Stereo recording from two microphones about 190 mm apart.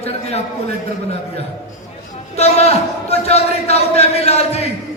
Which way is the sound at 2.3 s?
35° left (ahead or behind).